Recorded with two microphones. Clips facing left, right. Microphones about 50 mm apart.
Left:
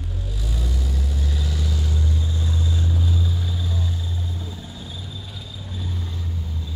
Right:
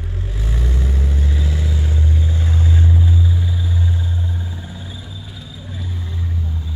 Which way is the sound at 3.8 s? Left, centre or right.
Right.